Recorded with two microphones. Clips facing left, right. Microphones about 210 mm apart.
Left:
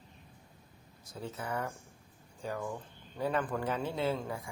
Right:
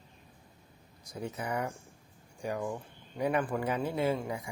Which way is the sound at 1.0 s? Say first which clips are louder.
Right 3 dB; 15° right (ahead or behind).